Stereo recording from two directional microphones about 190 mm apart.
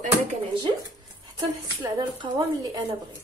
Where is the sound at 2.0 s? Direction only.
25° right (ahead or behind).